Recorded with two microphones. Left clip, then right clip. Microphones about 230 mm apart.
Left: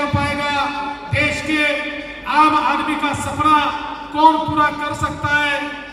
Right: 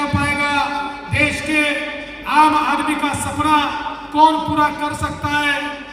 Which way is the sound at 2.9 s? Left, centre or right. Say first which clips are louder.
Even; right.